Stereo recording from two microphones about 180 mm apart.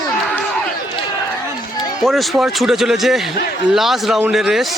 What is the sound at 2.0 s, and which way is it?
A man's voice, centre (ahead or behind).